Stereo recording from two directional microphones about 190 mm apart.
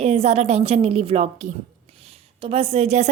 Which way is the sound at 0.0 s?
35° right (ahead or behind).